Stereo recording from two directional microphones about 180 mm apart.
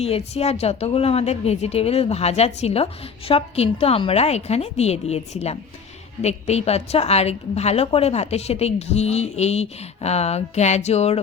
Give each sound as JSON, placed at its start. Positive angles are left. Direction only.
{"t": 0.0, "sound": "a woman's voice", "side_deg": 35}